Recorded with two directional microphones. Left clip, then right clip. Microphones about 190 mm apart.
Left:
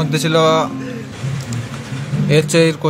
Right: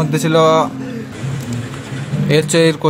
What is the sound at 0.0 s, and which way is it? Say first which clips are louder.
Speech: right 2 dB; 10° right (ahead or behind).